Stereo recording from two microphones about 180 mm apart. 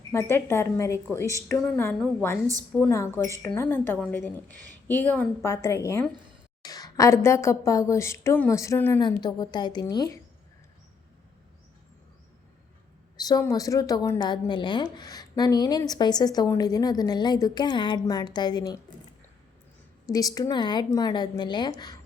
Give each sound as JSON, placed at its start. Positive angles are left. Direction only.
{"t": 0.1, "sound": "a woman's voice", "side_deg": 15}
{"t": 13.1, "sound": "a woman's voice", "side_deg": 20}
{"t": 20.1, "sound": "a woman's voice", "side_deg": 20}